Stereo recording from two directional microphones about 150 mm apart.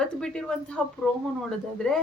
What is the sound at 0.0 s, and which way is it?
A woman's voice, 5° left (ahead or behind).